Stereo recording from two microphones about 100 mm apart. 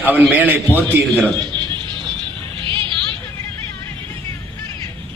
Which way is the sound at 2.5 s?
60° right (ahead or behind).